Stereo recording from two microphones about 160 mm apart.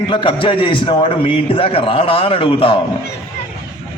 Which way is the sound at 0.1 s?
30° left (ahead or behind).